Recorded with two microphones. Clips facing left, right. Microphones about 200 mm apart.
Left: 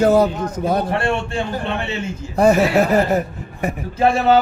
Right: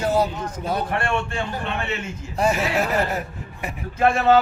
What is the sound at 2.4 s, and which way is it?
Speech, 40° left (ahead or behind).